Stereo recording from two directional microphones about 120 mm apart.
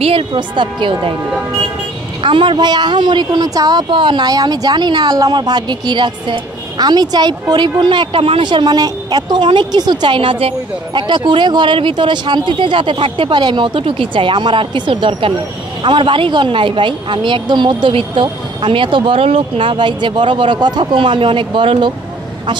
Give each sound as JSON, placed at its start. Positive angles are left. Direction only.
{"t": 0.0, "sound": "a woman's voice", "side_deg": -45}
{"t": 2.2, "sound": "a woman's voice", "side_deg": -40}